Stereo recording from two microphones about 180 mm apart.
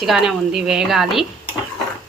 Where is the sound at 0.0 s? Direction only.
Centre (ahead or behind).